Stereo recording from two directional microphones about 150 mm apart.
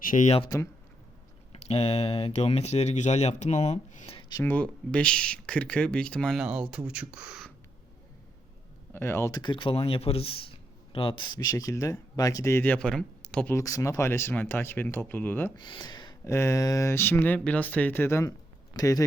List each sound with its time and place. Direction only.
0.0 s speech: 65° left (ahead or behind)
0.4 s speech: 20° left (ahead or behind)
1.5 s speech: 45° left (ahead or behind)
4.2 s a sound: 25° left (ahead or behind)
4.4 s speech: 10° left (ahead or behind); by 7.4 s 5° right (ahead or behind)
8.9 s speech: 15° left (ahead or behind)
9.4 s speech: 35° left (ahead or behind); by 13.6 s 10° left (ahead or behind)
13.6 s speech: 20° left (ahead or behind)
15.5 s speech: 30° left (ahead or behind)